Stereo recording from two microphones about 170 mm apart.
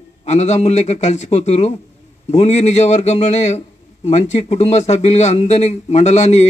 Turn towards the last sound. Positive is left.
turn(degrees=40)  # may be behind; listen again after turning